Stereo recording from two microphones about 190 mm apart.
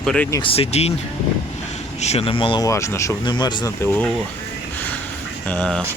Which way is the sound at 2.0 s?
30° left (ahead or behind).